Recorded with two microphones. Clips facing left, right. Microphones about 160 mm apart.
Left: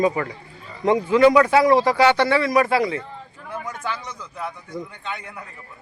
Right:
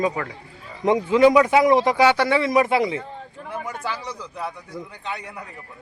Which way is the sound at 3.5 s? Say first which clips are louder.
Even; 10° right (ahead or behind).